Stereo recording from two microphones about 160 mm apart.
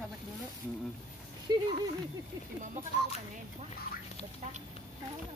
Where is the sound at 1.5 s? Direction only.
25° right (ahead or behind).